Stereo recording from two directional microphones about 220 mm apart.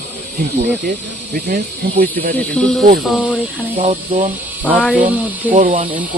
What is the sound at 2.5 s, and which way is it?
Speech, 5° left (ahead or behind).